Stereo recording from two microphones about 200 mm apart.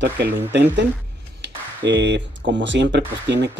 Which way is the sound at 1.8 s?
60° right (ahead or behind).